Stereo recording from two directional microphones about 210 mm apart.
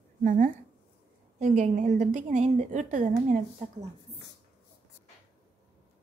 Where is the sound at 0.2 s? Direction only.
40° right (ahead or behind).